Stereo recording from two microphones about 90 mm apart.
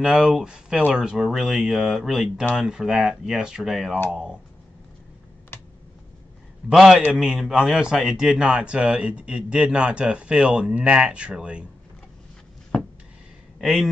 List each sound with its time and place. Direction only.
0.0 s a man's voice: 5° right (ahead or behind)
6.7 s a man's voice: centre (ahead or behind)
13.6 s speech: centre (ahead or behind)